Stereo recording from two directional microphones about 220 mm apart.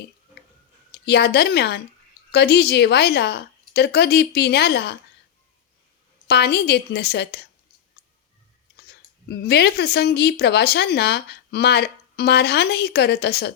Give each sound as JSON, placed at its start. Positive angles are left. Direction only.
{"t": 0.9, "sound": "a woman's voice", "side_deg": 50}
{"t": 6.2, "sound": "speech", "side_deg": 45}
{"t": 9.3, "sound": "speech", "side_deg": 50}